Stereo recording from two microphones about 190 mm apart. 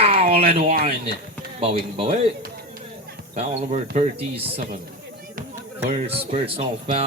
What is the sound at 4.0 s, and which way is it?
Speech, 30° right (ahead or behind).